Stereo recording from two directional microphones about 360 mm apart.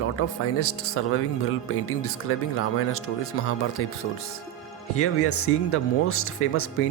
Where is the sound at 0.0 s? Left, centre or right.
Left.